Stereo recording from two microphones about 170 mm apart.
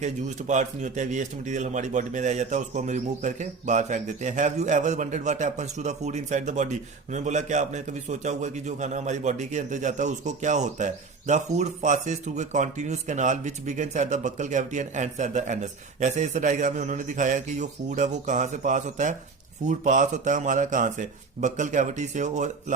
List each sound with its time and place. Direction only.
0.0 s speech: 45° right (ahead or behind)